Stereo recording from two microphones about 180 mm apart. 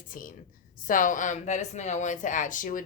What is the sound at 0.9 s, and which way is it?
Speech, 45° left (ahead or behind).